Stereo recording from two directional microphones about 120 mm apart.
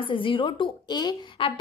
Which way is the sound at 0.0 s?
45° left (ahead or behind).